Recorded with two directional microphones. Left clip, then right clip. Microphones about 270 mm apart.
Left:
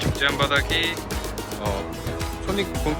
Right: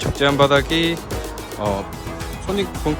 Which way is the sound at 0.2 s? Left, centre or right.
Centre.